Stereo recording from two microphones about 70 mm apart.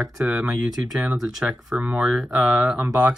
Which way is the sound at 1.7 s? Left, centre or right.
Centre.